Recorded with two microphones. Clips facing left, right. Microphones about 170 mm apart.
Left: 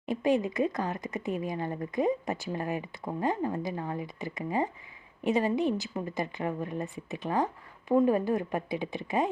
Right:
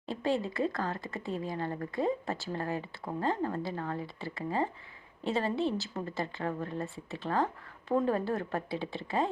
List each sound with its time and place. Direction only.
0.0 s speech: 15° left (ahead or behind)